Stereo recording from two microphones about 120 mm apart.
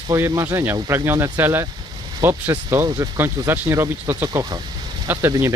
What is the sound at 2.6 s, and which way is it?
Speech, 30° right (ahead or behind).